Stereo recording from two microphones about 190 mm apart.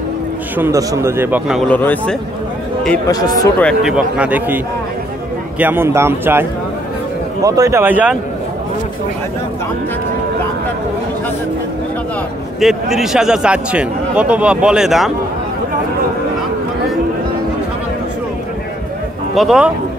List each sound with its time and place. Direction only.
0.6 s speech: 15° right (ahead or behind)
1.7 s a man's voice: 10° left (ahead or behind)
3.1 s speech: 20° left (ahead or behind)
3.5 s speech: 5° left (ahead or behind)
3.9 s speech: 5° right (ahead or behind)
5.6 s speech: 10° right (ahead or behind)
7.4 s speech: 15° right (ahead or behind)
12.5 s speech: centre (ahead or behind)
19.3 s speech: centre (ahead or behind)